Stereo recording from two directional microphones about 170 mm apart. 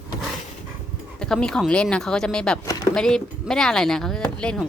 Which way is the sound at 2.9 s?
5° left (ahead or behind).